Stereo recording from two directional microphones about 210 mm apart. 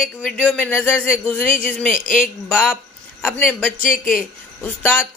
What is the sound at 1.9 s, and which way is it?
Speech, 35° left (ahead or behind).